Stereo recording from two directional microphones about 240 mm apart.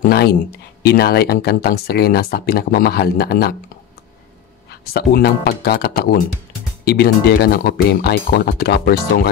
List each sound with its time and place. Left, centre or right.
0.0 s a sound: left
0.8 s speech: left
4.9 s speech: left